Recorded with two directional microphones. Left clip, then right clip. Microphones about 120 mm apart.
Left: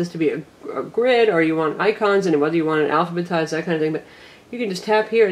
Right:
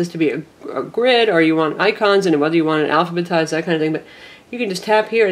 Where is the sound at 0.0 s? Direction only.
25° right (ahead or behind).